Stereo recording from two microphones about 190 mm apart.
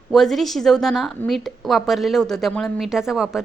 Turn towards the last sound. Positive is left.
turn(degrees=0)  # may be behind; listen again after turning